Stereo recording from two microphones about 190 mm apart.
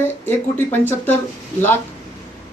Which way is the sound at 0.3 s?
10° left (ahead or behind).